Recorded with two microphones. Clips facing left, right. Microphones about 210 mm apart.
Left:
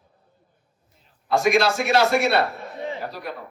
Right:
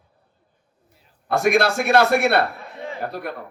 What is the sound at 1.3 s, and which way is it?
Speech, 60° right (ahead or behind).